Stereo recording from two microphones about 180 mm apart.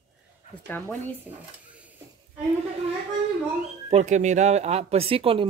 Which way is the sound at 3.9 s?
40° right (ahead or behind).